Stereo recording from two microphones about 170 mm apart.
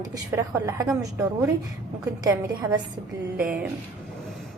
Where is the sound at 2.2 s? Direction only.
25° right (ahead or behind).